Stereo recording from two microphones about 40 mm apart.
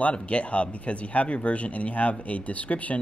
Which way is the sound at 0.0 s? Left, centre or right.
Left.